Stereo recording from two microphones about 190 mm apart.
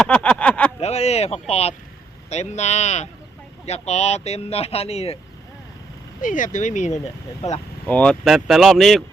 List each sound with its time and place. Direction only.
0.0 s a sound: 5° left (ahead or behind)
0.8 s speech: 35° left (ahead or behind)
6.2 s speech: 45° left (ahead or behind)
7.9 s speech: 5° left (ahead or behind)